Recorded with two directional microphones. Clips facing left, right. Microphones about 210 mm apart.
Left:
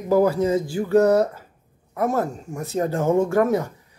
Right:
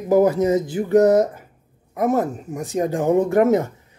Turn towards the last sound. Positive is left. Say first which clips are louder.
# right 3 dB
turn(degrees=-20)  # may be behind; listen again after turning